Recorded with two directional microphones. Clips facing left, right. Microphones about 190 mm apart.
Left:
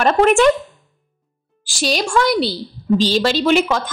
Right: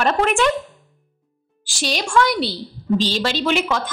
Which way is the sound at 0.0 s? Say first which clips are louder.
Left 5 dB; 45° left (ahead or behind).